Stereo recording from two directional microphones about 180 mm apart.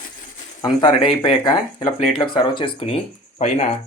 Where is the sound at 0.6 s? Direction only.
25° left (ahead or behind).